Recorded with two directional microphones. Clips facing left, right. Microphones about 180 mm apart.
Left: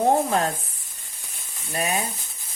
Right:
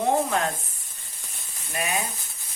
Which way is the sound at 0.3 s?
35° left (ahead or behind).